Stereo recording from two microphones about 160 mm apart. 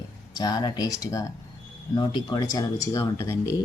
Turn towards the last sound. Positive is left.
turn(degrees=20)  # may be behind; listen again after turning